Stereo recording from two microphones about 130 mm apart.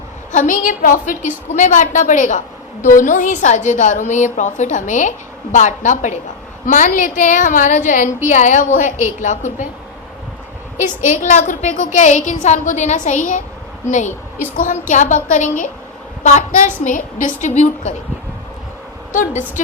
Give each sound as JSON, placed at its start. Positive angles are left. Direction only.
{"t": 0.3, "sound": "a woman's voice", "side_deg": 80}
{"t": 1.5, "sound": "a woman's voice", "side_deg": 70}
{"t": 10.8, "sound": "a woman's voice", "side_deg": 75}
{"t": 14.5, "sound": "a woman's voice", "side_deg": 90}
{"t": 19.1, "sound": "a woman's voice", "side_deg": 75}